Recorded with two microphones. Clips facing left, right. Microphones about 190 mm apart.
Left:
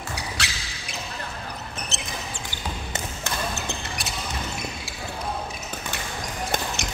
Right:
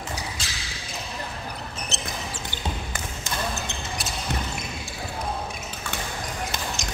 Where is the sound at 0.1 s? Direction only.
70° left (ahead or behind).